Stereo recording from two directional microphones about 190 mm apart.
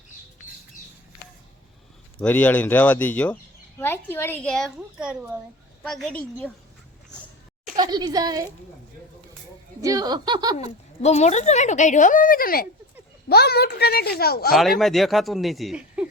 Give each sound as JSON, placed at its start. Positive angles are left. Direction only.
{"t": 2.2, "sound": "speech", "side_deg": 10}
{"t": 4.8, "sound": "a woman's voice", "side_deg": -5}
{"t": 7.8, "sound": "speech", "side_deg": -20}
{"t": 9.8, "sound": "speech", "side_deg": -20}
{"t": 11.0, "sound": "a child's voice", "side_deg": 35}
{"t": 14.5, "sound": "a man's voice", "side_deg": 0}